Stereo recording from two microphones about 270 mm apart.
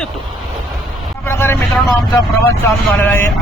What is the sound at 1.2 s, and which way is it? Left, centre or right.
Speech, centre.